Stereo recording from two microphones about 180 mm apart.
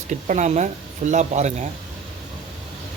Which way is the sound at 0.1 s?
40° right (ahead or behind).